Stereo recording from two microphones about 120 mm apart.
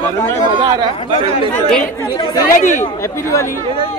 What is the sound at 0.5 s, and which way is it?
Speech, 40° right (ahead or behind).